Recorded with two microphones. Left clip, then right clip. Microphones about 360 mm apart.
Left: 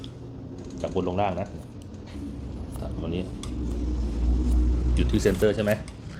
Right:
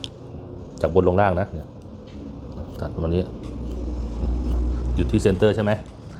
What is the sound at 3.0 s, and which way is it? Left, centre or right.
Speech, right.